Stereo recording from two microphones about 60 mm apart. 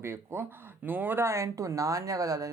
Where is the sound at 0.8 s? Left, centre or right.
Right.